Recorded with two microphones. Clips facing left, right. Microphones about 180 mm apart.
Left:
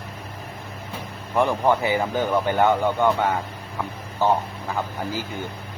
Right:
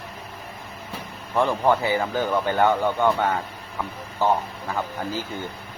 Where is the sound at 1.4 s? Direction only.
15° left (ahead or behind).